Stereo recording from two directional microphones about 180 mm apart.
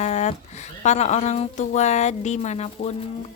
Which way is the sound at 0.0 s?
40° left (ahead or behind).